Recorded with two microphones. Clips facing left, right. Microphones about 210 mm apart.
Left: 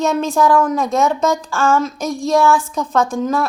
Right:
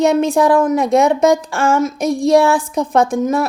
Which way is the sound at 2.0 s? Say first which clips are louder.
Right 6 dB; 60° right (ahead or behind).